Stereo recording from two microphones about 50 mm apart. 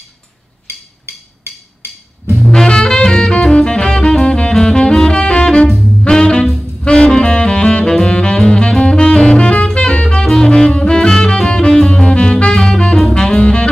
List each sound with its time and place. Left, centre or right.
2.5 s music: centre
6.4 s saxophone: centre
6.8 s saxophone: centre
11.9 s music: centre
13.0 s saxophone: centre